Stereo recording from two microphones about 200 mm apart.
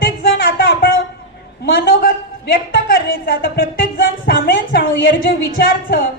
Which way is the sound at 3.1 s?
45° left (ahead or behind).